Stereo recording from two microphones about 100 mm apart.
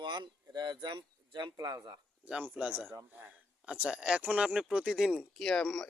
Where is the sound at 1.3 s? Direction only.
50° right (ahead or behind).